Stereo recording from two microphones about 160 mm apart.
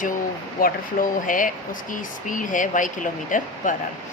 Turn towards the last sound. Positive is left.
turn(degrees=55)  # may be behind; listen again after turning